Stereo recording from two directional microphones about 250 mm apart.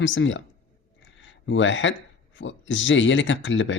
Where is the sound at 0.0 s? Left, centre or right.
Left.